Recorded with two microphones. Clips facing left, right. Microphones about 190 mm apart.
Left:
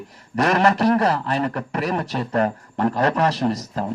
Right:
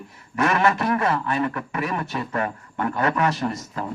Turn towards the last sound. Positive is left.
turn(degrees=35)  # may be behind; listen again after turning